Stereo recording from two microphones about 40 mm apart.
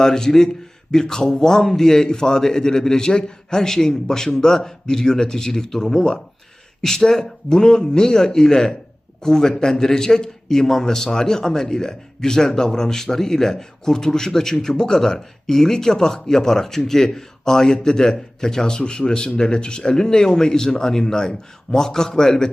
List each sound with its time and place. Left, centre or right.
0.0 s a man's voice: centre